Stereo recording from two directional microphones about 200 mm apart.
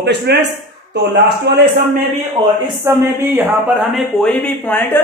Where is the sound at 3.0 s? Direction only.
10° right (ahead or behind); by 5.0 s 10° left (ahead or behind).